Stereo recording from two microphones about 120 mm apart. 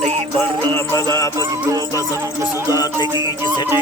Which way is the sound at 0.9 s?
30° left (ahead or behind).